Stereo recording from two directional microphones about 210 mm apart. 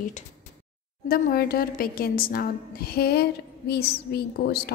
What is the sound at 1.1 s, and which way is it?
A woman's voice, 45° left (ahead or behind).